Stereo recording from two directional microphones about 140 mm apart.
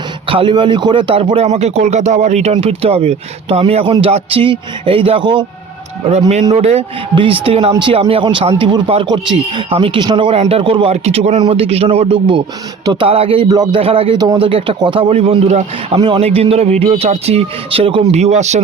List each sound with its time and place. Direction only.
0.3 s speech: 40° right (ahead or behind)
6.1 s speech: 50° right (ahead or behind)
16.0 s speech: 35° right (ahead or behind); by 18.6 s 55° right (ahead or behind)